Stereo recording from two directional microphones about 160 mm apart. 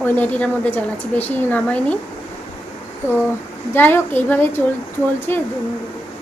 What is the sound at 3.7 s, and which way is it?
A woman's voice, 15° left (ahead or behind).